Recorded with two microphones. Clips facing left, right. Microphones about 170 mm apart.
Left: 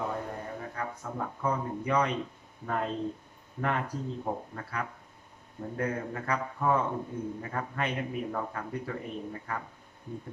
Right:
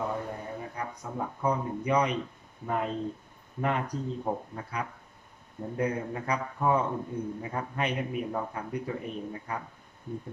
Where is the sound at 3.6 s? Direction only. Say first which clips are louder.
Right 2 dB; 15° right (ahead or behind).